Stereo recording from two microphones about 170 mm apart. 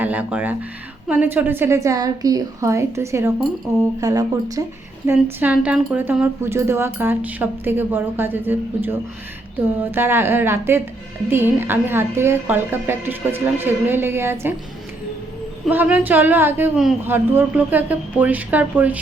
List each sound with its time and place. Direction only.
0.0 s speech: 10° right (ahead or behind)
5.0 s speech: 10° right (ahead or behind)
15.6 s speech: 10° right (ahead or behind)